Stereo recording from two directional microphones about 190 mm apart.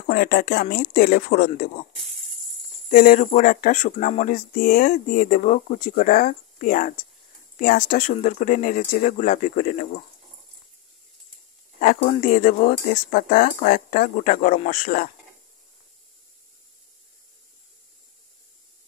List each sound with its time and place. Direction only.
0.1 s speech: 50° left (ahead or behind)
2.9 s speech: 45° left (ahead or behind)
12.1 s speech: 40° left (ahead or behind)